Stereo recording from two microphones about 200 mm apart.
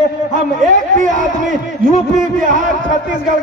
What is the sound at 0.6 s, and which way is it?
Speech, 40° right (ahead or behind).